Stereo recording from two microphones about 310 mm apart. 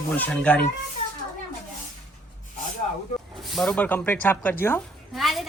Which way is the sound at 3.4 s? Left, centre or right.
Centre.